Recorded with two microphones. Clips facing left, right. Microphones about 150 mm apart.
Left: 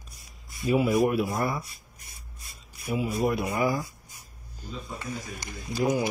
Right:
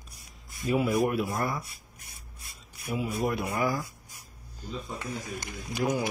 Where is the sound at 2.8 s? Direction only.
10° left (ahead or behind).